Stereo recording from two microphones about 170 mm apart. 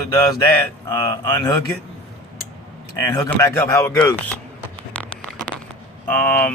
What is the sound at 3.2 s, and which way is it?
Speech, 15° left (ahead or behind).